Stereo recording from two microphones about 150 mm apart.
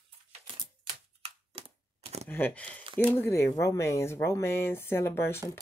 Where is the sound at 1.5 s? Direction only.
40° right (ahead or behind).